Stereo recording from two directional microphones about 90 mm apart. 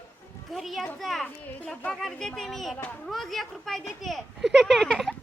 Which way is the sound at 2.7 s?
15° left (ahead or behind).